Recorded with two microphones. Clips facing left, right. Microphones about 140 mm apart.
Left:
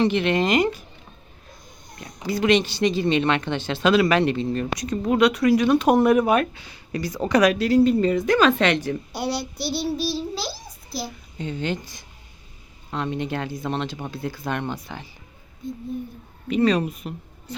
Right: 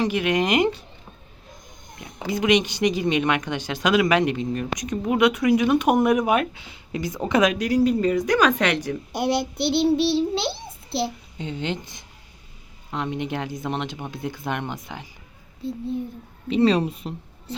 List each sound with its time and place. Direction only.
0.0 s speech: 10° right (ahead or behind)
2.2 s speech: 15° right (ahead or behind)
9.1 s a child's voice: 50° right (ahead or behind)
9.6 s a child's voice: 25° right (ahead or behind)
16.5 s speech: 30° right (ahead or behind)